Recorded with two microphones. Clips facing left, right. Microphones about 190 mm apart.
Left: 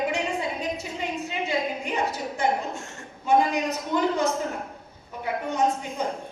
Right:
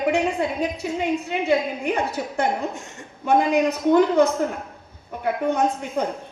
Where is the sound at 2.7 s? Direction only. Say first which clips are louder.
Right 1 dB; 15° right (ahead or behind).